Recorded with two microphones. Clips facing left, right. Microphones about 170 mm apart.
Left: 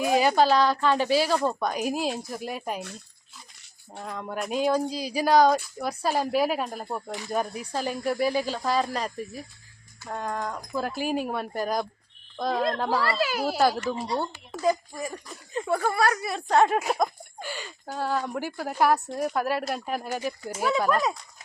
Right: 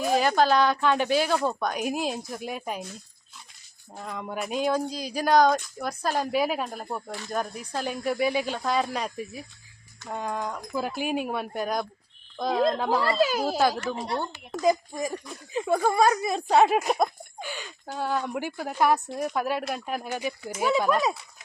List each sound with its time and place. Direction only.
0.0 s speech: 10° left (ahead or behind)
3.9 s speech: centre (ahead or behind)
13.0 s speech: 20° right (ahead or behind)
14.6 s speech: 15° right (ahead or behind)
17.0 s speech: 5° left (ahead or behind)